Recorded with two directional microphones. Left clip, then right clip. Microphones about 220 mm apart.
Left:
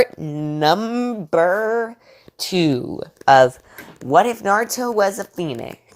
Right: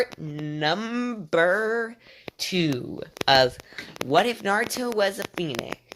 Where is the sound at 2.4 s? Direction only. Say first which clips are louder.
Left 7 dB; 20° left (ahead or behind).